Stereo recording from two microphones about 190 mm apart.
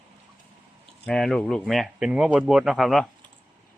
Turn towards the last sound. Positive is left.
turn(degrees=0)  # may be behind; listen again after turning